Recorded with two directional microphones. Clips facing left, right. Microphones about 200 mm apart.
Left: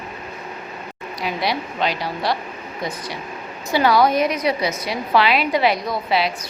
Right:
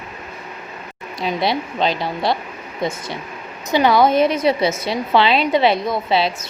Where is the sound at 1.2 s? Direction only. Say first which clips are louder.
Right 3 dB; 25° right (ahead or behind).